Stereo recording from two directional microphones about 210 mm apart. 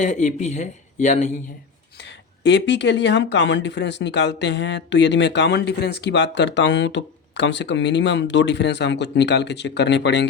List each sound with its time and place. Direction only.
0.0 s a man's voice: 35° left (ahead or behind)
2.0 s speech: 55° left (ahead or behind)